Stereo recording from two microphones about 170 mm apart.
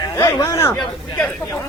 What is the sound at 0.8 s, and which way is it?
Speech, 5° left (ahead or behind).